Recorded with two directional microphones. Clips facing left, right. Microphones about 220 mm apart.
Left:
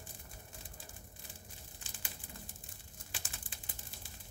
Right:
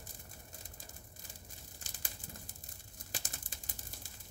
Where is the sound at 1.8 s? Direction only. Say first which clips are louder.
Right 2 dB; 40° right (ahead or behind).